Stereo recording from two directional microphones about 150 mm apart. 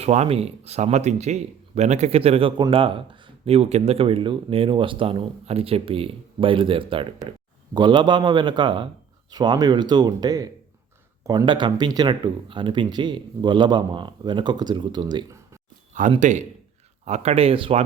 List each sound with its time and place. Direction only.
0.0 s speech: 45° right (ahead or behind); by 15.4 s 30° right (ahead or behind)
15.9 s speech: 60° right (ahead or behind)
17.1 s speech: 45° right (ahead or behind)